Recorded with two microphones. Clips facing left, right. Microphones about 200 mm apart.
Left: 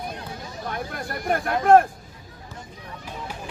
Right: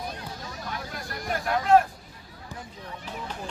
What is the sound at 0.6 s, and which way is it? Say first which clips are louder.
Vehicle: left 7 dB; 55° left (ahead or behind).